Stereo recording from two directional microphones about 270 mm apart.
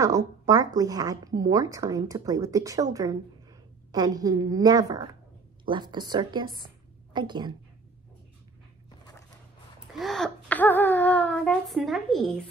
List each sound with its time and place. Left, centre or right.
0.0 s a woman's voice: centre
9.9 s speech: centre